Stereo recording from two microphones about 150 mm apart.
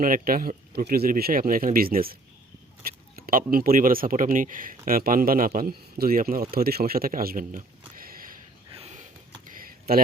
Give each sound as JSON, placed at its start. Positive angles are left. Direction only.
{"t": 0.0, "sound": "a man's voice", "side_deg": -70}
{"t": 8.7, "sound": "sniff", "side_deg": -45}
{"t": 9.6, "sound": "a sound", "side_deg": -75}